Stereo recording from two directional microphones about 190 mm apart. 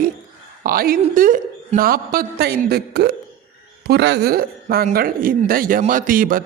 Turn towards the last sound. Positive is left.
turn(degrees=-45)  # may be behind; listen again after turning